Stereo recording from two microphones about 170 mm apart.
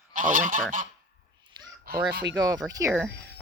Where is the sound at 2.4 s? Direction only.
20° right (ahead or behind).